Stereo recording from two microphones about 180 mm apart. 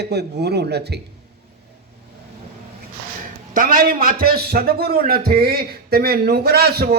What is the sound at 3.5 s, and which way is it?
A man's voice, 50° right (ahead or behind).